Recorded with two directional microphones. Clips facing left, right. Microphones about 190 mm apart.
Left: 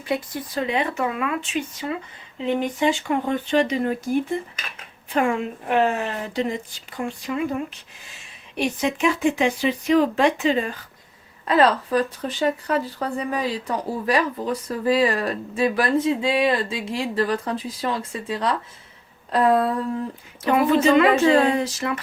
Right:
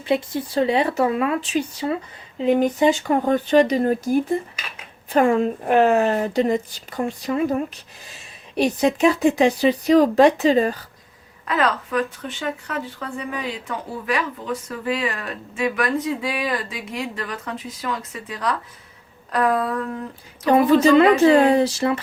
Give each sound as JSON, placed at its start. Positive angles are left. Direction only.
{"t": 0.0, "sound": "a woman's voice", "side_deg": -25}
{"t": 11.4, "sound": "speech", "side_deg": 30}
{"t": 19.3, "sound": "a sound", "side_deg": 25}
{"t": 20.5, "sound": "a woman's voice", "side_deg": -35}